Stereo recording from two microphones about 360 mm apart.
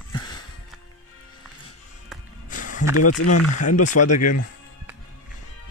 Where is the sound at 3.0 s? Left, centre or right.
Left.